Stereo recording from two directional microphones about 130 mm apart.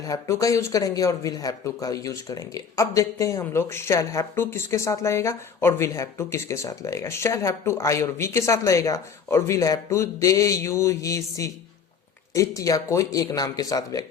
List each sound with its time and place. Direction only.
0.0 s speech: 25° left (ahead or behind)